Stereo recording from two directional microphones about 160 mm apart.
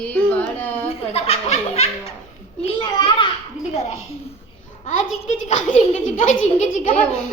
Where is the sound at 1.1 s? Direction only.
40° left (ahead or behind).